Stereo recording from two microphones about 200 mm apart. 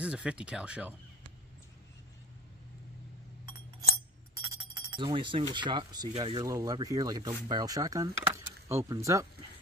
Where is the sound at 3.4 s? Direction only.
20° right (ahead or behind).